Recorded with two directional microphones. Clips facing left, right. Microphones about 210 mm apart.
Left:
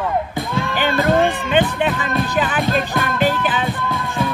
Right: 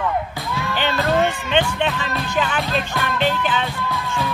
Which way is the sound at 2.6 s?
50° left (ahead or behind).